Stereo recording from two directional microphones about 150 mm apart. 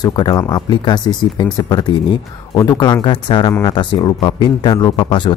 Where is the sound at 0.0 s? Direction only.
25° left (ahead or behind).